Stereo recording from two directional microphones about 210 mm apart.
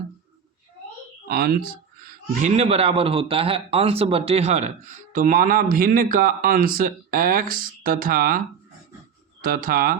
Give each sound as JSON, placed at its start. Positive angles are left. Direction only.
{"t": 1.3, "sound": "speech", "side_deg": -45}
{"t": 2.6, "sound": "a man's voice", "side_deg": -30}
{"t": 9.4, "sound": "speech", "side_deg": -45}